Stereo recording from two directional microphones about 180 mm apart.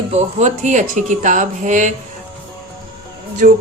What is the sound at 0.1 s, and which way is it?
Speech, 40° right (ahead or behind).